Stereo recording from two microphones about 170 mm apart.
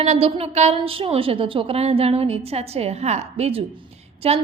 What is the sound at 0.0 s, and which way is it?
A woman's voice, 40° right (ahead or behind).